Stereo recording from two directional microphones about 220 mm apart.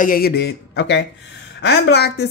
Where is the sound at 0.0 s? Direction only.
40° left (ahead or behind).